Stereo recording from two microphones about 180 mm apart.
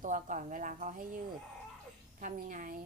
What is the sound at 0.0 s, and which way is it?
A woman's voice, 45° right (ahead or behind).